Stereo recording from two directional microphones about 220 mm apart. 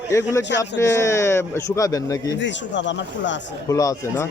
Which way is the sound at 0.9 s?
10° left (ahead or behind).